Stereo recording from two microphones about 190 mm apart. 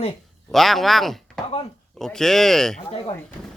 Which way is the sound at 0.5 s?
Centre (ahead or behind).